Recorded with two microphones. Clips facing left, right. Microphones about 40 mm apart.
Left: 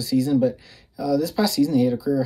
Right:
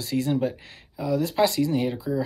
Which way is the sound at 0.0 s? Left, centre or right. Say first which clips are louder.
Left 5 dB; right.